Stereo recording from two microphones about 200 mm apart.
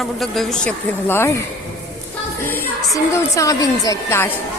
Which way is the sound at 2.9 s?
15° left (ahead or behind).